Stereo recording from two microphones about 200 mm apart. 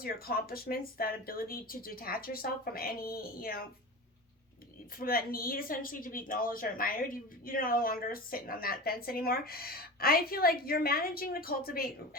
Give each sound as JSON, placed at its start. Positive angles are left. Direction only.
{"t": 0.0, "sound": "a woman's voice", "side_deg": 50}
{"t": 4.9, "sound": "a woman's voice", "side_deg": 45}